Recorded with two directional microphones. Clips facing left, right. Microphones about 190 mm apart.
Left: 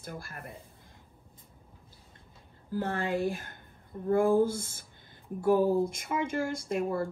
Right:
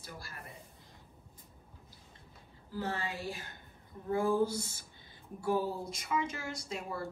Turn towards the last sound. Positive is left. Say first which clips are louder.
# left 9 dB
turn(degrees=50)  # may be behind; listen again after turning